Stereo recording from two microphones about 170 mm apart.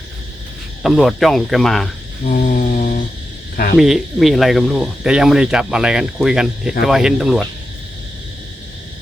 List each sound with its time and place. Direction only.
0.8 s speech: centre (ahead or behind)
2.3 s mantra: 50° left (ahead or behind)
3.8 s speech: centre (ahead or behind)